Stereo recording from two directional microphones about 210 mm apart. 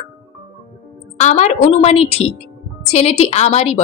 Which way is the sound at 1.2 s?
35° left (ahead or behind).